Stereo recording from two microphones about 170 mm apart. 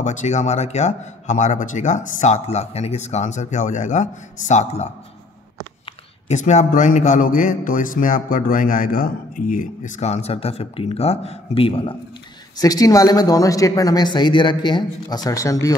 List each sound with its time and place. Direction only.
0.0 s a man's voice: 45° left (ahead or behind)
6.2 s a man's voice: 45° left (ahead or behind)
12.5 s speech: 20° left (ahead or behind)